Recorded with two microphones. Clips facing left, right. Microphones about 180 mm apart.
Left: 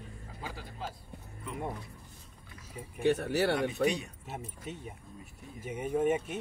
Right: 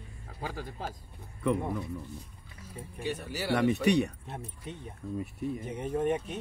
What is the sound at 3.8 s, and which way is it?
Speech, 70° right (ahead or behind).